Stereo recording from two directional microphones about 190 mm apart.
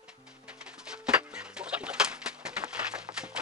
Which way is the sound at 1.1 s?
5° right (ahead or behind).